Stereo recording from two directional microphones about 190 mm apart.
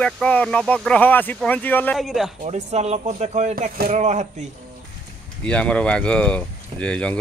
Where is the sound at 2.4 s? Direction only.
35° right (ahead or behind).